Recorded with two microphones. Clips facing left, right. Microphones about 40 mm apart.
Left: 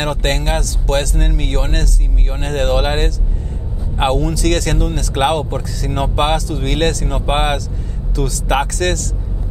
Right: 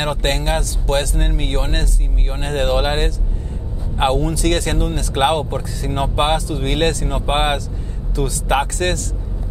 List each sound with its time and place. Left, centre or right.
0.0 s speech: left